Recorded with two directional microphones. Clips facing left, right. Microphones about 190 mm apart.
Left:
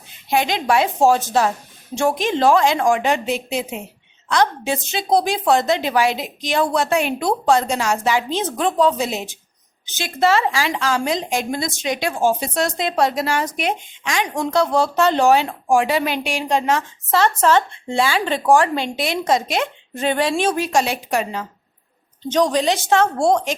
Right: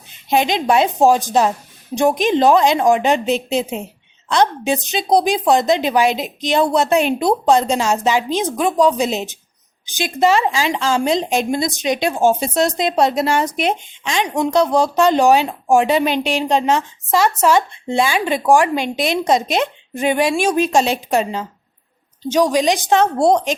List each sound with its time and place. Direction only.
0.3 s a woman's voice: 20° right (ahead or behind)
20.7 s a woman's voice: 25° right (ahead or behind)
22.3 s speech: 10° right (ahead or behind)